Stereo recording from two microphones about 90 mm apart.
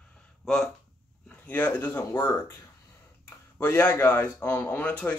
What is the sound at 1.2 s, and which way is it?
A man's voice, 20° left (ahead or behind).